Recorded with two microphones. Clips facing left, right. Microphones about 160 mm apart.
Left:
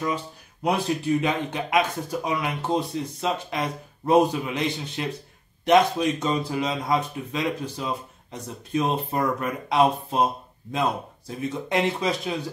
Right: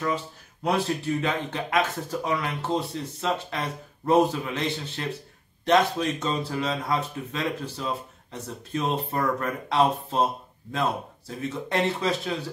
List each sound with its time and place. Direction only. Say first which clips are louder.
0.7 s speech: left 2 dB; 15° left (ahead or behind)